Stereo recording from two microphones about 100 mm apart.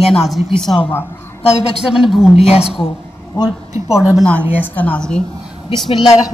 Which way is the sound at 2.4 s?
80° left.